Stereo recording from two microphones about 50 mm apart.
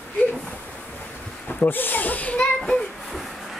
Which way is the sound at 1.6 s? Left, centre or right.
Left.